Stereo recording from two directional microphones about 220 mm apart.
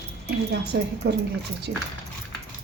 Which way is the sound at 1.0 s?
50° right (ahead or behind).